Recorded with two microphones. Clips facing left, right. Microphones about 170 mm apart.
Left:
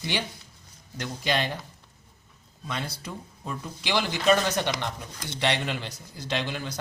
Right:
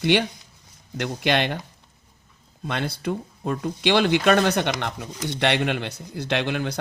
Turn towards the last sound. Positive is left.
turn(degrees=-60)  # may be behind; listen again after turning